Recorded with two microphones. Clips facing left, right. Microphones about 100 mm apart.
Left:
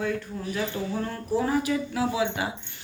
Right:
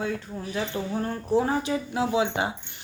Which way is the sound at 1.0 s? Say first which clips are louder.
Right 4 dB; 30° right (ahead or behind).